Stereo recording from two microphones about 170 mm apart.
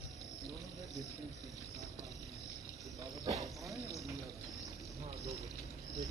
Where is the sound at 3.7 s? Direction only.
20° right (ahead or behind).